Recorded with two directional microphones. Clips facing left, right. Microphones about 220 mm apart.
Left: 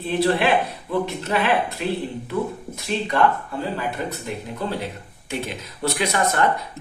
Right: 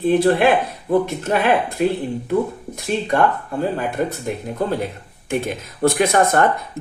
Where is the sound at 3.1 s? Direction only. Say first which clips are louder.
Right 1 dB; 50° right (ahead or behind).